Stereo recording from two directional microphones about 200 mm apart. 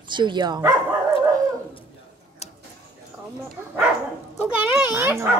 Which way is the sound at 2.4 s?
30° left (ahead or behind).